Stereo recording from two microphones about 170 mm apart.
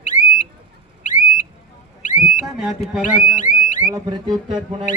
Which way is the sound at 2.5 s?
Centre (ahead or behind).